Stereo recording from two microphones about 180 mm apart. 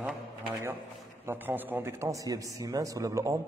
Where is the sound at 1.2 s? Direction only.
10° right (ahead or behind).